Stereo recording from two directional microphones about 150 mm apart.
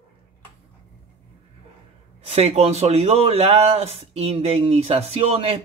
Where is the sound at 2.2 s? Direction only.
45° right (ahead or behind).